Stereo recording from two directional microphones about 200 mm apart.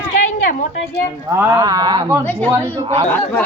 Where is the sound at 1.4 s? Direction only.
15° right (ahead or behind).